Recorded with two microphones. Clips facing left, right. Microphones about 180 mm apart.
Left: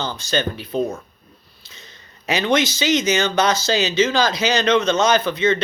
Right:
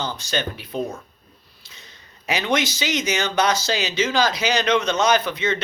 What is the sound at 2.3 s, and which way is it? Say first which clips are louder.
Speech: left 4 dB; 10° right (ahead or behind).